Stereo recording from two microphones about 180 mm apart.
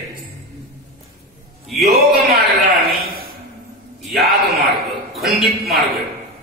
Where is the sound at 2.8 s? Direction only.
55° right (ahead or behind).